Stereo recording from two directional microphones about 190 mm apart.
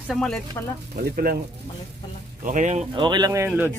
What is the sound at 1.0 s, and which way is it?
Speech, 50° right (ahead or behind).